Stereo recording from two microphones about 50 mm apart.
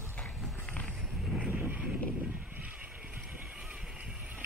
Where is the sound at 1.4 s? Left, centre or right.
Right.